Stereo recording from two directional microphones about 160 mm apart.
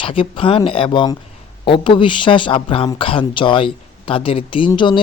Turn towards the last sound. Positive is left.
turn(degrees=30)  # may be behind; listen again after turning